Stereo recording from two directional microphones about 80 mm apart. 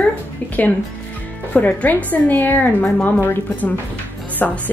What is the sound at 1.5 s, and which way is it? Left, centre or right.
A woman's voice, centre.